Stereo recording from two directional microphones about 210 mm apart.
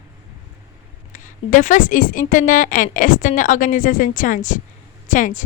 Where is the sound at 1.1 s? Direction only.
35° left (ahead or behind).